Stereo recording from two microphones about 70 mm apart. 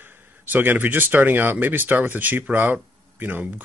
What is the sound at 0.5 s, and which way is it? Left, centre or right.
Speech, right.